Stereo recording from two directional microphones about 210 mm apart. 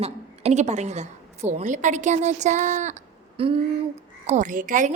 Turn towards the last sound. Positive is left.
turn(degrees=-40)  # may be behind; listen again after turning